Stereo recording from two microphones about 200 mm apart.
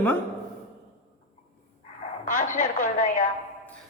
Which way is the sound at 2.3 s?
40° left (ahead or behind).